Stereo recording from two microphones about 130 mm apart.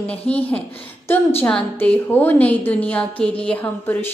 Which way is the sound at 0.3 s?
50° left (ahead or behind).